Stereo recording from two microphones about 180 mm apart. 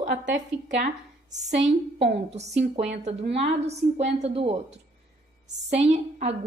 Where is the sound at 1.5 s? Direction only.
75° right (ahead or behind).